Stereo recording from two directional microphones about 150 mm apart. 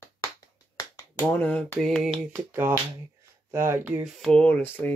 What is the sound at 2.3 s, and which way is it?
Speech, 15° right (ahead or behind).